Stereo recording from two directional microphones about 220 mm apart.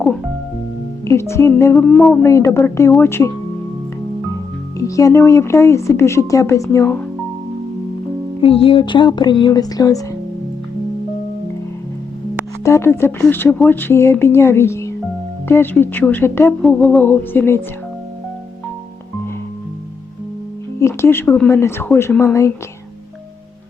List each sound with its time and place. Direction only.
1.0 s speech: 10° left (ahead or behind)
2.2 s speech: 15° left (ahead or behind)
4.8 s speech: 15° left (ahead or behind)
8.4 s speech: 25° left (ahead or behind)
12.6 s speech: 15° left (ahead or behind)
20.7 s speech: 10° left (ahead or behind)